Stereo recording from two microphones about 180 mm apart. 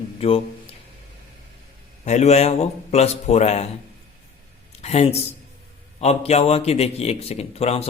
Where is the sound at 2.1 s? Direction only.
40° left (ahead or behind).